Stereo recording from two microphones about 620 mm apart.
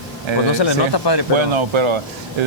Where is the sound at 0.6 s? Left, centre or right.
Left.